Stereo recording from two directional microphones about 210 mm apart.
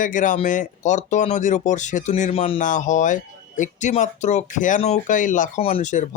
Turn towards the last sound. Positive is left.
turn(degrees=35)  # may be behind; listen again after turning